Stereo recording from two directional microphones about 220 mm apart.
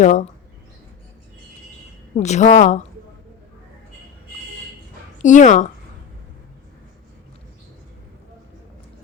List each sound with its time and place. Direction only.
0.0 s a woman's voice: 35° left (ahead or behind)
2.1 s a woman's voice: 30° left (ahead or behind)
5.2 s a woman's voice: 35° left (ahead or behind)